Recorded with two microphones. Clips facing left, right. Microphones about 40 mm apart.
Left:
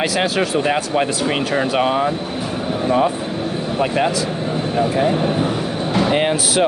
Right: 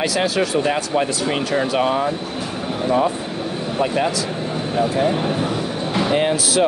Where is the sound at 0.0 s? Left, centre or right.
Left.